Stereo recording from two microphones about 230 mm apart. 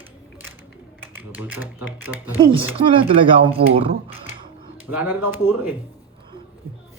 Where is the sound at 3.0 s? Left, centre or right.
Right.